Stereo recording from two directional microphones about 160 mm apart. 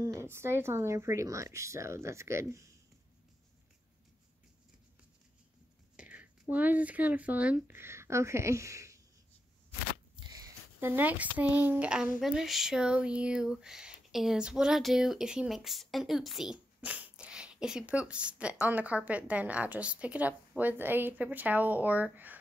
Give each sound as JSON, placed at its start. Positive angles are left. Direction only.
{"t": 0.0, "sound": "speech", "side_deg": -15}
{"t": 5.9, "sound": "speech", "side_deg": -10}
{"t": 10.2, "sound": "speech", "side_deg": -25}